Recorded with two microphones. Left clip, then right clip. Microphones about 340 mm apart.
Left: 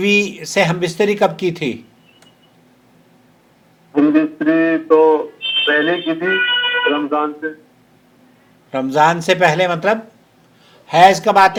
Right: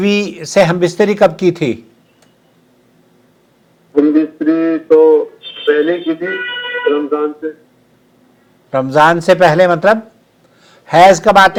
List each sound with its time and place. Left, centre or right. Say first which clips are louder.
0.0 s speech: even; right
3.9 s a sound: right 3 dB; left
5.6 s speech: right 5 dB; left
8.7 s a man's voice: right 4 dB; right